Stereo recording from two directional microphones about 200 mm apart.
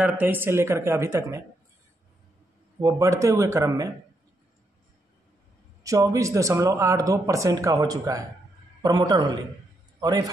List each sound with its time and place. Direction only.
0.0 s speech: 10° right (ahead or behind)
2.8 s speech: 15° right (ahead or behind)
5.9 s a man's voice: 15° right (ahead or behind)